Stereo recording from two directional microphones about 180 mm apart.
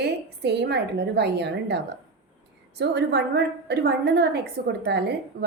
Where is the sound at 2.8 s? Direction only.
70° right (ahead or behind).